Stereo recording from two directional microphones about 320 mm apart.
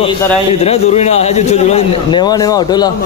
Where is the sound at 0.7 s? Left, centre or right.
Centre.